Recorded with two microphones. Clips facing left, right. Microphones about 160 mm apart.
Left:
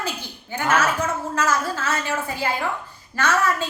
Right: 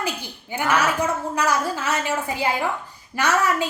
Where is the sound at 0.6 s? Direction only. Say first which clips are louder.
Even; 15° right (ahead or behind).